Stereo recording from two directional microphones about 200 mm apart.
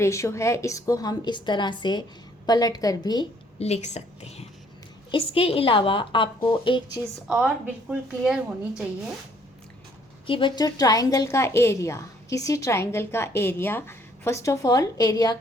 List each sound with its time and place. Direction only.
0.0 s a woman's voice: 15° left (ahead or behind)
3.6 s a woman's voice: 35° left (ahead or behind)
7.3 s speech: 5° right (ahead or behind)
10.2 s a woman's voice: 25° left (ahead or behind)